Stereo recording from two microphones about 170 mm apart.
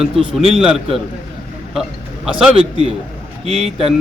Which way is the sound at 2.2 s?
5° right (ahead or behind).